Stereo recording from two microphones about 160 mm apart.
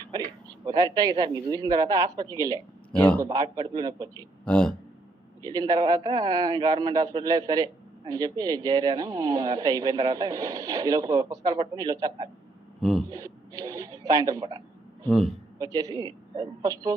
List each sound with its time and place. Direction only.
0.1 s a sound: 25° right (ahead or behind)
0.9 s a man's voice: 25° right (ahead or behind)
4.4 s speech: 5° left (ahead or behind)
5.4 s a man's voice: 25° right (ahead or behind)
13.1 s a sound: 20° right (ahead or behind)
15.0 s a man's voice: centre (ahead or behind)
15.5 s a man's voice: 20° right (ahead or behind)